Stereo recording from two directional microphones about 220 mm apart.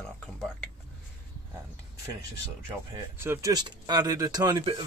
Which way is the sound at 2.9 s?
10° right (ahead or behind).